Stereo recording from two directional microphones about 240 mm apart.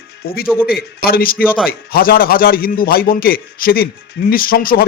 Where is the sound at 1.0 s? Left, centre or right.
Left.